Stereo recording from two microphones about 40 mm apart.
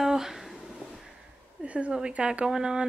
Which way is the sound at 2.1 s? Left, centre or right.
Right.